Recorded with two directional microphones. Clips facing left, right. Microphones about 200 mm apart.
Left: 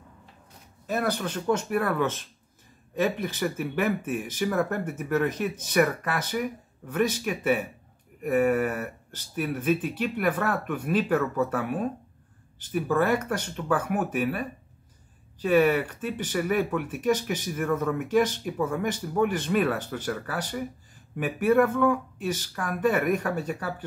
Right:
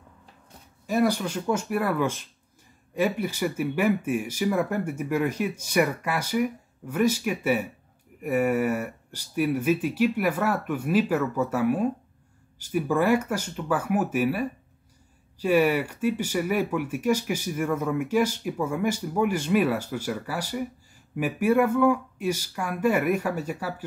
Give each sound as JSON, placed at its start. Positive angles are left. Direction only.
{"t": 0.8, "sound": "speech", "side_deg": -10}